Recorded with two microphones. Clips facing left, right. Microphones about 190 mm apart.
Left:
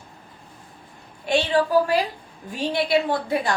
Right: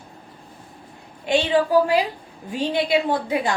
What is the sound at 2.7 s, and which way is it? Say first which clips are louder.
Speech: even; 15° right (ahead or behind).